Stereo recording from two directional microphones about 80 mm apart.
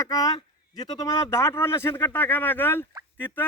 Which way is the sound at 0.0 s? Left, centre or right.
Left.